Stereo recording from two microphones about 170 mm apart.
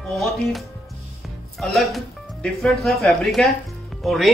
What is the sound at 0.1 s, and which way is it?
A man's voice, centre (ahead or behind).